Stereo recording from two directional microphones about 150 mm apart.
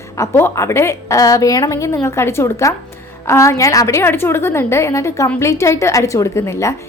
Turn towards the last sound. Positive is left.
turn(degrees=20)  # may be behind; listen again after turning